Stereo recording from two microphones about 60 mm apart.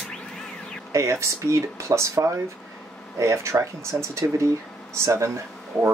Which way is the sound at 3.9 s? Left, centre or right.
Right.